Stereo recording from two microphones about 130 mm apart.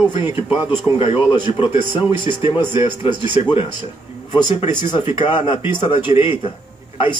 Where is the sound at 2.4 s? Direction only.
40° left (ahead or behind).